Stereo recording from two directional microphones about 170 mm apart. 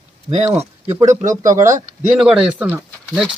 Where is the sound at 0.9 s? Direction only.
15° right (ahead or behind).